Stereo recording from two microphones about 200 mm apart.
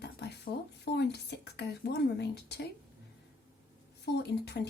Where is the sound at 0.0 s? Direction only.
55° left (ahead or behind).